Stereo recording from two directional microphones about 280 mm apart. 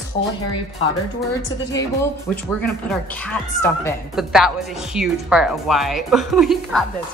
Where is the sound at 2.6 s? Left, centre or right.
Centre.